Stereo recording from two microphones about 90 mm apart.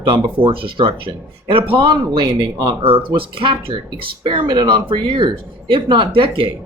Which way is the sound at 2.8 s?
90° right.